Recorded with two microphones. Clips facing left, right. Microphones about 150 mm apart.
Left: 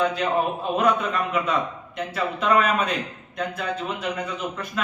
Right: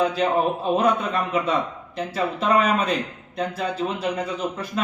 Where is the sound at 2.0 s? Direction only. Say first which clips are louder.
Right 2 dB; 30° right (ahead or behind).